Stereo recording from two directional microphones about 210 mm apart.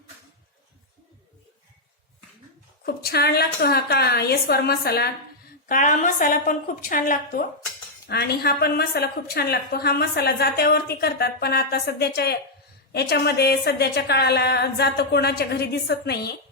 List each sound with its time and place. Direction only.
2.8 s a woman's voice: 50° left (ahead or behind)
5.6 s a woman's voice: 35° left (ahead or behind)